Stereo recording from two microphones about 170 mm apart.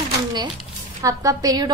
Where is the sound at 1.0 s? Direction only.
20° right (ahead or behind).